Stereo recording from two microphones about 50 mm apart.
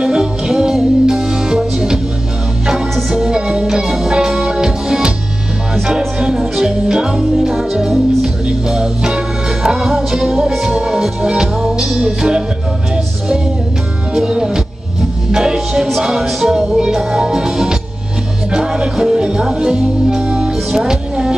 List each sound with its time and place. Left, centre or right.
0.0 s music: centre
3.2 s music: centre
14.1 s music: centre